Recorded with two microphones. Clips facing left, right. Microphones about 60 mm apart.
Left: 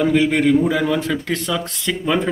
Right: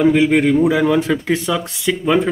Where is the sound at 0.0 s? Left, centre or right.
Centre.